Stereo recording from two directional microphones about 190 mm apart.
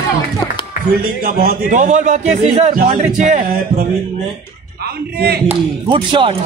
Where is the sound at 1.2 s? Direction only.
50° right (ahead or behind).